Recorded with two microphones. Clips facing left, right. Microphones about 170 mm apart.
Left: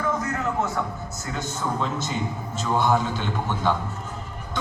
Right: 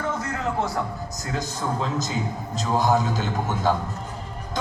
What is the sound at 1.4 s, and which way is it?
A man's voice, 35° right (ahead or behind).